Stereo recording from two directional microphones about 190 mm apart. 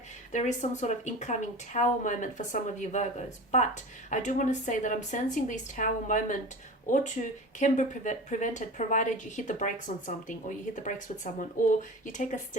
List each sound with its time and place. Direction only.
0.3 s speech: 40° left (ahead or behind)
4.1 s speech: 40° left (ahead or behind)